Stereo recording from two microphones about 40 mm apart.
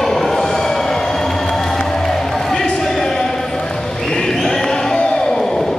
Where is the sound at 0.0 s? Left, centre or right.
Centre.